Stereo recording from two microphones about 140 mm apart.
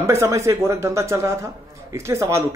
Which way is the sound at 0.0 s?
20° right (ahead or behind).